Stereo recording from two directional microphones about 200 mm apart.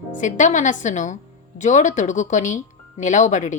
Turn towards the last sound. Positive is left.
turn(degrees=35)  # may be behind; listen again after turning